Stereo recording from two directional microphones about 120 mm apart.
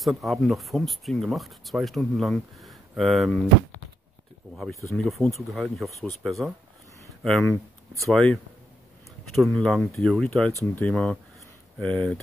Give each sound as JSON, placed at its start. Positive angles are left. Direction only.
{"t": 0.0, "sound": "speech", "side_deg": 0}
{"t": 4.9, "sound": "speech", "side_deg": 5}
{"t": 10.7, "sound": "speech", "side_deg": 15}